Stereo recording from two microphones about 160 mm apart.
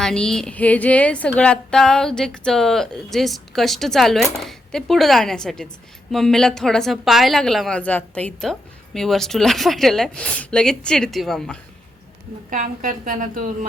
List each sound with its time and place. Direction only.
0.0 s a woman's voice: 5° left (ahead or behind)
12.5 s a woman's voice: 55° right (ahead or behind)